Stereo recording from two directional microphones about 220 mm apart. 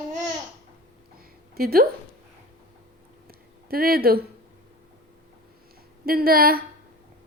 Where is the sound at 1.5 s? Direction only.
45° right (ahead or behind).